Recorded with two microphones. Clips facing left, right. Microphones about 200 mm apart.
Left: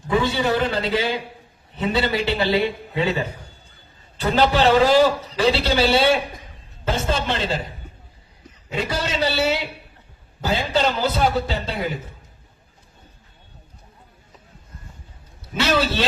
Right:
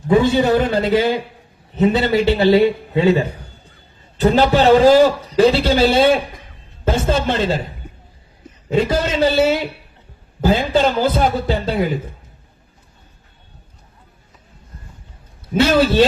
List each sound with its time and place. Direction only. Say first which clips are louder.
0.1 s a man's voice: right 7 dB; 45° right (ahead or behind)
8.9 s a man's voice: right 7 dB; 50° right (ahead or behind)
15.5 s a man's voice: right 8 dB; 50° right (ahead or behind)